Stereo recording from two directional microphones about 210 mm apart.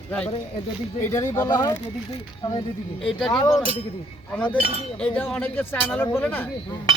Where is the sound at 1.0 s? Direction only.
15° left (ahead or behind).